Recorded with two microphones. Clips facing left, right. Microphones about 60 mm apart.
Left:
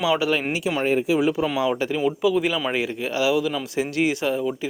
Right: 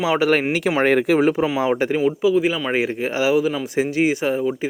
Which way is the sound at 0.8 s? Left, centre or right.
Right.